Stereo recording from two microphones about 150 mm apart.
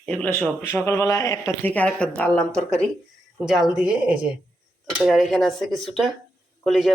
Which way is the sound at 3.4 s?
5° right (ahead or behind).